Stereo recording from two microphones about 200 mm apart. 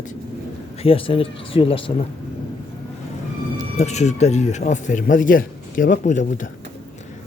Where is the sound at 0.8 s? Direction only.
25° left (ahead or behind).